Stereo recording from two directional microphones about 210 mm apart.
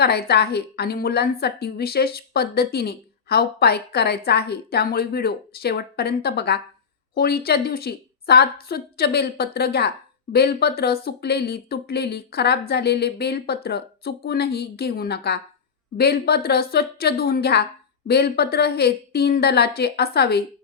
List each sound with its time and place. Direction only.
0.0 s speech: 50° left (ahead or behind)